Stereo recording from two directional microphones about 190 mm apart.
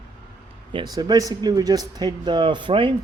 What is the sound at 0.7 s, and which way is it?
Speech, 20° right (ahead or behind).